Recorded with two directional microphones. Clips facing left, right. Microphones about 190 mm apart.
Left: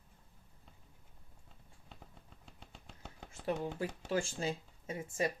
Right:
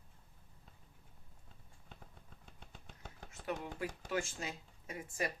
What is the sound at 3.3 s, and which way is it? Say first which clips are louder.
Speech: left 5 dB; 30° left (ahead or behind).